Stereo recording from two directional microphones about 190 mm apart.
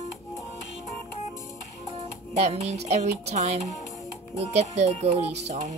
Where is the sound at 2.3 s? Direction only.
35° right (ahead or behind).